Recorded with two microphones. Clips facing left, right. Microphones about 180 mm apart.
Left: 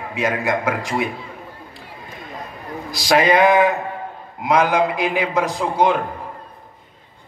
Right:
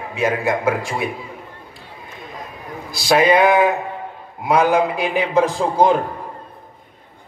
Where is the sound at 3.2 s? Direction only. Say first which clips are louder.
Right 1 dB; 10° right (ahead or behind).